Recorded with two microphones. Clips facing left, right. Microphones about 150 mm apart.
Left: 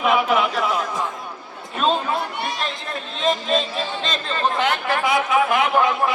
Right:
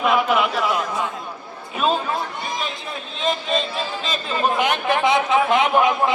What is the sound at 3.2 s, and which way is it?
Chatter, centre (ahead or behind).